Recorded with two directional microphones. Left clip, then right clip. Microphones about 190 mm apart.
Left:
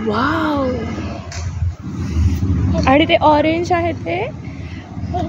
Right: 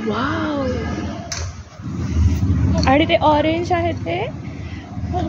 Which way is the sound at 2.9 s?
35° left (ahead or behind).